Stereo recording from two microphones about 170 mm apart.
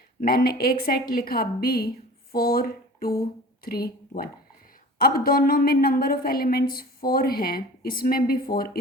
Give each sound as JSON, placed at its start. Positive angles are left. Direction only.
{"t": 0.2, "sound": "a woman's voice", "side_deg": 60}